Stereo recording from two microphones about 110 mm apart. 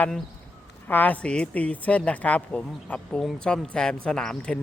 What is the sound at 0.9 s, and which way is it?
A woman's voice, 15° left (ahead or behind).